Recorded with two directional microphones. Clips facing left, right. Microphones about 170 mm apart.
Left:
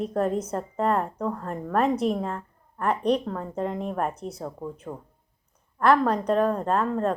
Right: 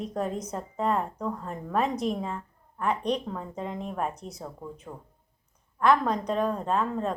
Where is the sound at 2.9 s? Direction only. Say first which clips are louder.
Left 4 dB; 35° left (ahead or behind).